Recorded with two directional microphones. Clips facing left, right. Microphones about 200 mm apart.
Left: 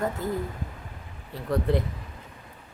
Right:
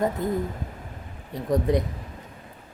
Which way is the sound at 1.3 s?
15° right (ahead or behind).